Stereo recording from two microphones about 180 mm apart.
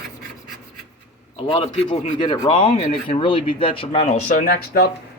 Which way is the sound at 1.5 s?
30° left (ahead or behind).